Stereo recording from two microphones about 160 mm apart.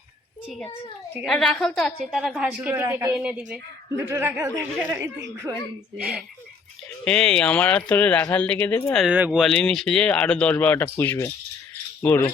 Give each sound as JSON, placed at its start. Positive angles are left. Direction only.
{"t": 1.2, "sound": "a woman's voice", "side_deg": 5}
{"t": 7.0, "sound": "speech", "side_deg": 5}
{"t": 9.0, "sound": "a woman's voice", "side_deg": -5}